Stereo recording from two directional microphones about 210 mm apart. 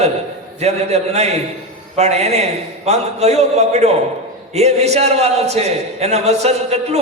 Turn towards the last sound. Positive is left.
turn(degrees=-30)  # may be behind; listen again after turning